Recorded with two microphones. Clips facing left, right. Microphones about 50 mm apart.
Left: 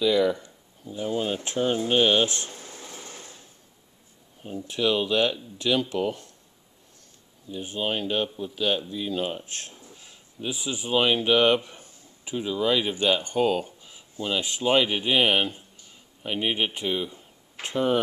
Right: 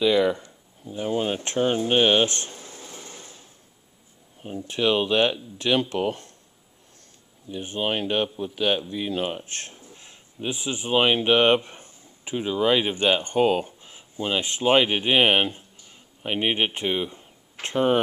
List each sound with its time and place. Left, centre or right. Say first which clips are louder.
0.0 s speech: right 2 dB; right
2.6 s a sound: even; centre
4.6 s speech: right 2 dB; right
7.4 s speech: right 2 dB; right
13.5 s a sound: right 2 dB; right
14.2 s speech: right 3 dB; right